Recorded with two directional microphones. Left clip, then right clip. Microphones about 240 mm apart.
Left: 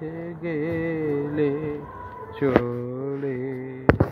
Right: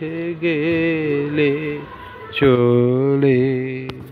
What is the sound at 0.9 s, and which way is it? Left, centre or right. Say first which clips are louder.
Music: right 6 dB; centre.